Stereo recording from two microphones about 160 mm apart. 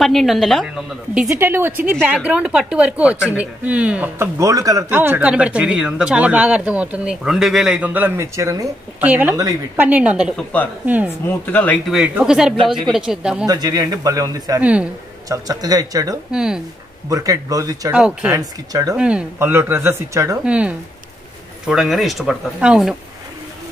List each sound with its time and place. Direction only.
0.0 s a woman's voice: centre (ahead or behind)
1.4 s speech: 15° right (ahead or behind)
9.8 s speech: 10° right (ahead or behind)
10.3 s speech: 10° left (ahead or behind)
11.9 s a woman's voice: 5° right (ahead or behind)
13.5 s speech: 25° right (ahead or behind)
14.6 s speech: 10° right (ahead or behind)
15.2 s speech: 20° right (ahead or behind)
16.3 s a woman's voice: 5° right (ahead or behind)
17.1 s speech: 20° right (ahead or behind)
17.9 s a woman's voice: 5° right (ahead or behind)
18.3 s speech: 20° right (ahead or behind)
18.9 s a woman's voice: 5° right (ahead or behind)